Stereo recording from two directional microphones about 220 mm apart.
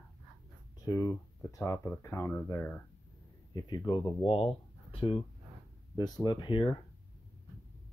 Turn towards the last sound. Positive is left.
turn(degrees=20)  # may be behind; listen again after turning